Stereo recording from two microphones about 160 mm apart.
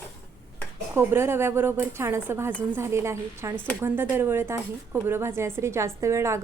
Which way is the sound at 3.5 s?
10° left (ahead or behind).